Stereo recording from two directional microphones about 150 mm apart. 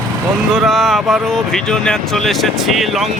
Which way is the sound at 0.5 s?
Centre (ahead or behind).